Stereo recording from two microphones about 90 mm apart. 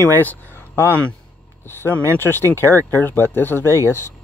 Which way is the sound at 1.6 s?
25° left (ahead or behind).